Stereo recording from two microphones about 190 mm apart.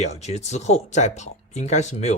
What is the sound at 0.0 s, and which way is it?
Speech, 35° left (ahead or behind).